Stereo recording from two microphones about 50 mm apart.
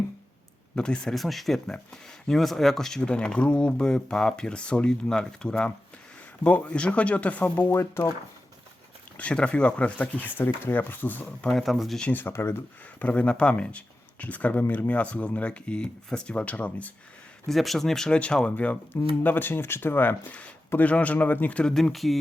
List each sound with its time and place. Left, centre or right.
0.8 s speech: centre
1.1 s speech: centre
6.4 s speech: left
7.5 s speech: left
9.3 s speech: centre; by 11.3 s left
11.4 s speech: centre
12.3 s speech: left
13.0 s speech: left
17.5 s speech: centre; by 18.8 s left
19.2 s speech: left
20.8 s speech: left
21.6 s speech: centre